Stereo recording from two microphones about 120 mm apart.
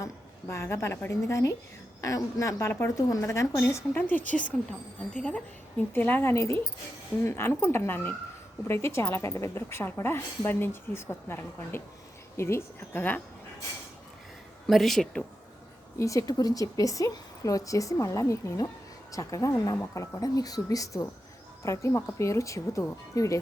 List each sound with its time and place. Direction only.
0.0 s a woman's voice: 25° left (ahead or behind)
5.9 s a woman's voice: 15° left (ahead or behind)
14.7 s speech: centre (ahead or behind)
16.0 s a woman's voice: 25° left (ahead or behind)